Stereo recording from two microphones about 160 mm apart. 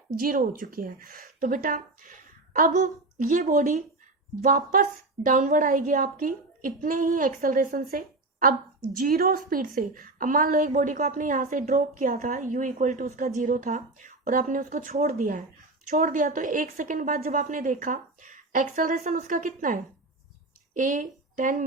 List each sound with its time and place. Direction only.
0.2 s a woman's voice: 60° right (ahead or behind)